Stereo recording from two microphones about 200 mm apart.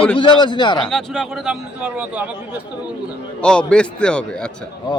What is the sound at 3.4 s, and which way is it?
A man's voice, 5° left (ahead or behind).